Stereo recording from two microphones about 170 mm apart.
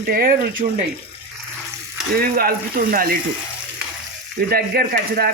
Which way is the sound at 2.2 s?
60° right (ahead or behind).